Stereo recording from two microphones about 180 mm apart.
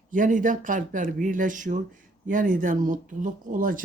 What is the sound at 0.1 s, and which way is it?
Speech, 45° right (ahead or behind).